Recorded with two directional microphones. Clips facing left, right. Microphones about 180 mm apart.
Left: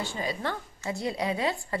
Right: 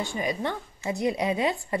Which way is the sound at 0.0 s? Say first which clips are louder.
Right 3 dB; 15° right (ahead or behind).